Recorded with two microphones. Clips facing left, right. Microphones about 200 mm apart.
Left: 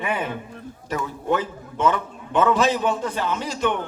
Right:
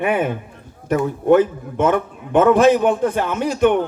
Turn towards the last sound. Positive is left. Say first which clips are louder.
# right 8 dB
turn(degrees=-55)  # may be behind; listen again after turning